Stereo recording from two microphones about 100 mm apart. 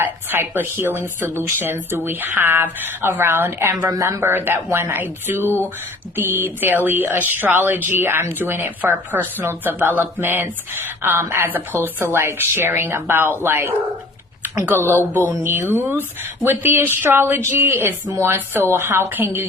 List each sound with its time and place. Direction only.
0.0 s speech: 20° right (ahead or behind)
3.8 s speech: 35° right (ahead or behind)